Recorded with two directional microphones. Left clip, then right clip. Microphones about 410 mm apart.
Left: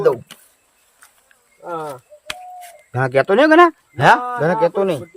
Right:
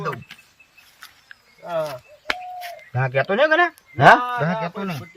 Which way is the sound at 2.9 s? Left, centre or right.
Centre.